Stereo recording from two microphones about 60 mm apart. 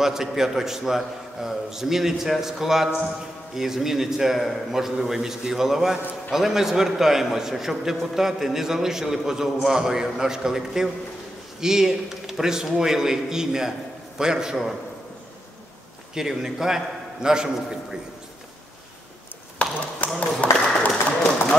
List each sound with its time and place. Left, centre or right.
0.0 s a man's voice: centre
16.2 s a man's voice: centre
19.6 s a sound: left